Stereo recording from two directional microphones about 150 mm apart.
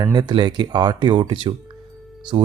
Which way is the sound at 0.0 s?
30° right (ahead or behind).